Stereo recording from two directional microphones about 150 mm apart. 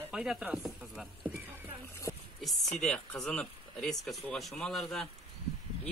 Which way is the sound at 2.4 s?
5° left (ahead or behind).